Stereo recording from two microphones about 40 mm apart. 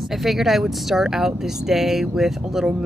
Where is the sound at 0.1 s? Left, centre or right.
Centre.